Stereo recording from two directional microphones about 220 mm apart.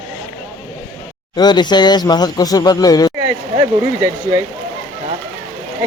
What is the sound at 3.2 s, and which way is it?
Speech, 15° right (ahead or behind).